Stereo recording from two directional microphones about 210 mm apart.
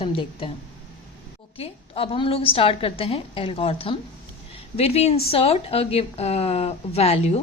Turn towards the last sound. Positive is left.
turn(degrees=30)  # may be behind; listen again after turning